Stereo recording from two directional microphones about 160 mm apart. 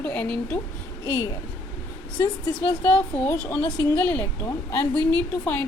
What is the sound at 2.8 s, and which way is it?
A woman's voice, 10° left (ahead or behind).